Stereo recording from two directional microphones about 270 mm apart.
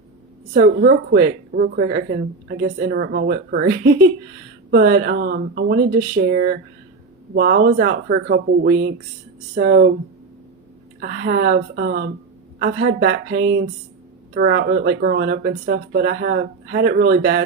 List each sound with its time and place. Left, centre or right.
0.5 s speech: right
11.0 s speech: right